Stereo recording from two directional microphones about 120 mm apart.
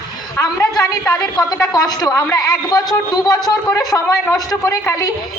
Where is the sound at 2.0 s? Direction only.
30° left (ahead or behind).